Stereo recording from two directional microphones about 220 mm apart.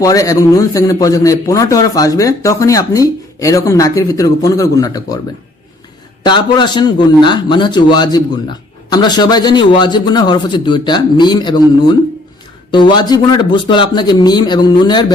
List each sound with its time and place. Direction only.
0.0 s a man's voice: 15° left (ahead or behind)
6.2 s speech: 20° left (ahead or behind)